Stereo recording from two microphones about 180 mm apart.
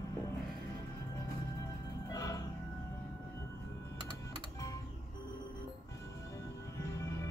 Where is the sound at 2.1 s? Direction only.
20° left (ahead or behind).